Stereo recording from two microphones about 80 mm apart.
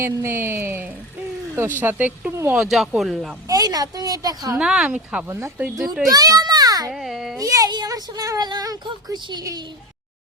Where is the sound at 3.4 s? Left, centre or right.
Right.